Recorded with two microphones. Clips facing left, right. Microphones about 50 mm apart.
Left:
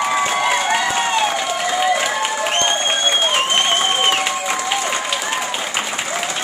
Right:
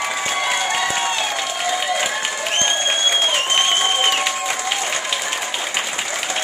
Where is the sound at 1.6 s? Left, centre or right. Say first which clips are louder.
Left 3 dB; centre.